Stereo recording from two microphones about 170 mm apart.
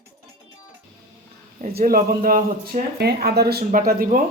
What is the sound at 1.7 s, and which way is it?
Speech, 60° right (ahead or behind).